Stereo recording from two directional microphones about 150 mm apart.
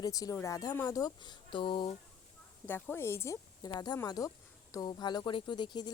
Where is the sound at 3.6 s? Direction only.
25° left (ahead or behind).